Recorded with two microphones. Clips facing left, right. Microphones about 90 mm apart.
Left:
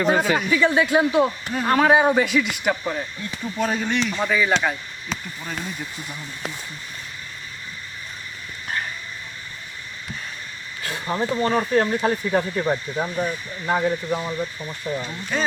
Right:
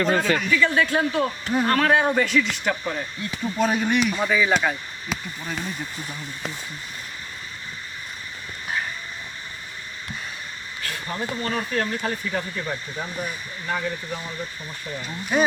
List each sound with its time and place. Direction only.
0.0 s speech: 15° left (ahead or behind)
3.6 s speech: 15° right (ahead or behind)
10.8 s speech: 25° left (ahead or behind)
15.3 s speech: 10° right (ahead or behind)